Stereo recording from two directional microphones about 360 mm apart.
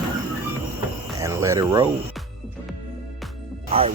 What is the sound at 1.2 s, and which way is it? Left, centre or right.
Speech, centre.